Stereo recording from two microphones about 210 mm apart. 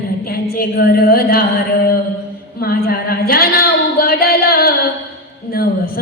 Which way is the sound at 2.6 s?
45° left (ahead or behind).